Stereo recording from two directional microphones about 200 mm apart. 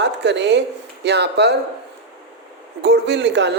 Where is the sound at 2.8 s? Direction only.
60° right (ahead or behind).